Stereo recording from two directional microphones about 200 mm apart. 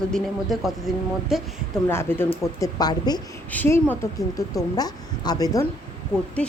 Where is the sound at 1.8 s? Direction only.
10° left (ahead or behind).